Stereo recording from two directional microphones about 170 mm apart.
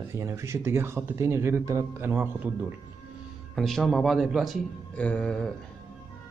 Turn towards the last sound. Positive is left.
turn(degrees=5)  # may be behind; listen again after turning